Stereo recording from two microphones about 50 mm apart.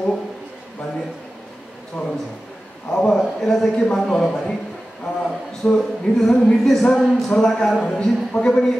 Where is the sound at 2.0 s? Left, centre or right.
Left.